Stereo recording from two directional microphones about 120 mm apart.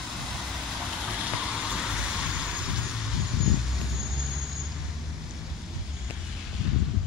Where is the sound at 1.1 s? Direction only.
5° right (ahead or behind).